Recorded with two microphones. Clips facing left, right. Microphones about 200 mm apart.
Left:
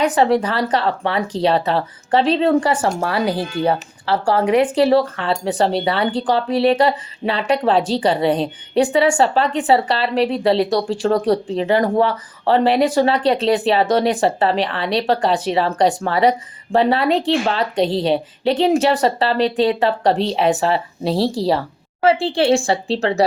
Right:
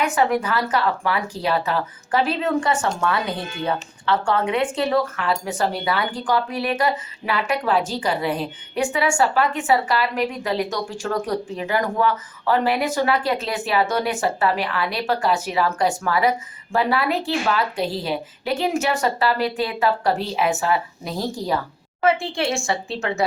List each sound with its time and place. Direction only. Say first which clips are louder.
0.0 s a woman's voice: left 5 dB; 35° left (ahead or behind)